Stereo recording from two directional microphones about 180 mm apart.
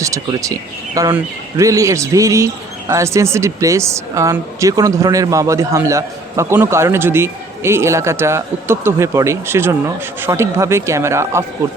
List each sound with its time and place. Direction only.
0.0 s speech: 20° right (ahead or behind)